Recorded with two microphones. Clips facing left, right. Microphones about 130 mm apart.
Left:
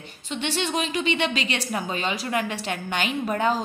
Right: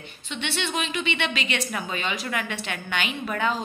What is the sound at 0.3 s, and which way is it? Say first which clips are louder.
A woman's voice: left 3 dB; 40° left (ahead or behind).